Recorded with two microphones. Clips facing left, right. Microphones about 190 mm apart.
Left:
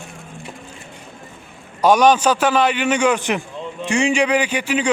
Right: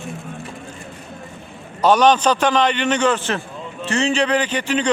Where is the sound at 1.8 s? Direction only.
10° left (ahead or behind).